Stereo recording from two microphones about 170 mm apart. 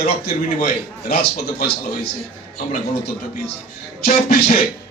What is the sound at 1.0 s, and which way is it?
Speech, 70° left (ahead or behind).